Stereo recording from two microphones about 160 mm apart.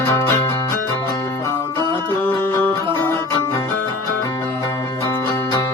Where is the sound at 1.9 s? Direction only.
15° left (ahead or behind).